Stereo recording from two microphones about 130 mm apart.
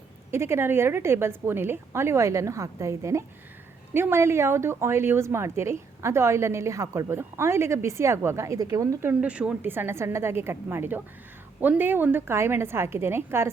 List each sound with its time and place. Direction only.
0.3 s a woman's voice: 20° right (ahead or behind)
9.0 s a woman's voice: 10° right (ahead or behind)